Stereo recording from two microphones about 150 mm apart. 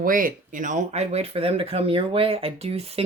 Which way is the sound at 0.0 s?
70° right (ahead or behind).